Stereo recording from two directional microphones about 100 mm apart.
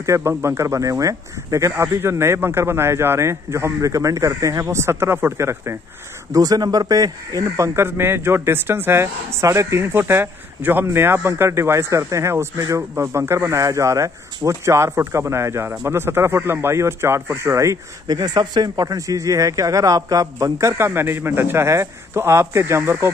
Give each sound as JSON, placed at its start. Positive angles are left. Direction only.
{"t": 0.0, "sound": "speech", "side_deg": -30}
{"t": 6.3, "sound": "speech", "side_deg": -40}